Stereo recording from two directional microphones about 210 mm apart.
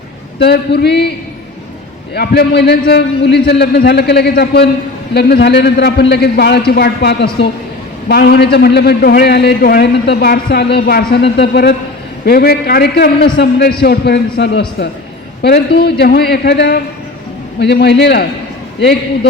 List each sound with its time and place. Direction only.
0.3 s a man's voice: 50° left (ahead or behind)
2.1 s a man's voice: 50° left (ahead or behind)